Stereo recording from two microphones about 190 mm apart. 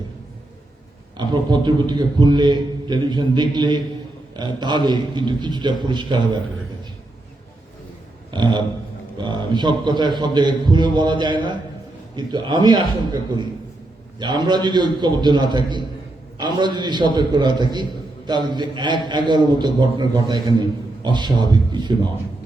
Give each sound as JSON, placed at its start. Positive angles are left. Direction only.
{"t": 1.1, "sound": "a man's voice", "side_deg": -25}
{"t": 8.3, "sound": "a sound", "side_deg": -25}
{"t": 9.1, "sound": "a man's voice", "side_deg": -25}